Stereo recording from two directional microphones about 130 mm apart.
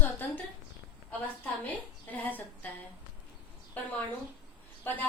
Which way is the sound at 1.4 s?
15° left (ahead or behind).